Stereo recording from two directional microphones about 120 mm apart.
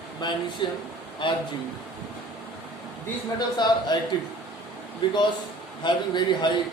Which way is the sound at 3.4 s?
35° left (ahead or behind).